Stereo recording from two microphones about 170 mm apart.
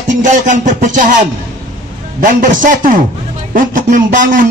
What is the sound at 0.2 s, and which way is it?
Speech, 45° right (ahead or behind).